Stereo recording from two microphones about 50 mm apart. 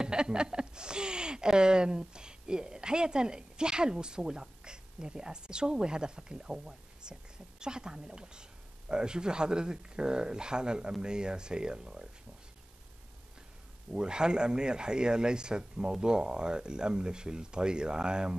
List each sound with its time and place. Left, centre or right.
0.0 s speech: centre
13.9 s speech: centre